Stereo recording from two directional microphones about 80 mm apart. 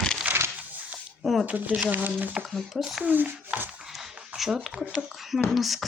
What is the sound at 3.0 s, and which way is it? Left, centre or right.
Speech, right.